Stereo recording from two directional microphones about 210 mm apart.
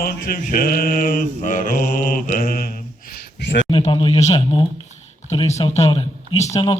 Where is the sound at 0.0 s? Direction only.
45° left (ahead or behind).